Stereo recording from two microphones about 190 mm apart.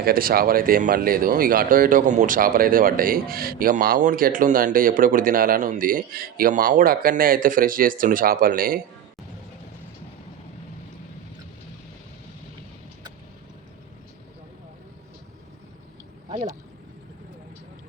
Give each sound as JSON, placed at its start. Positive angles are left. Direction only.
{"t": 0.0, "sound": "speech", "side_deg": -50}